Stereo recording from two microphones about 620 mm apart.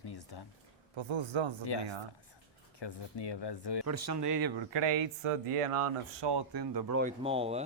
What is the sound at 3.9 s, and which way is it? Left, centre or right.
Speech, right.